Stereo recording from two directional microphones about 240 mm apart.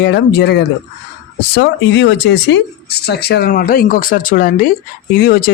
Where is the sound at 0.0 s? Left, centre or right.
Left.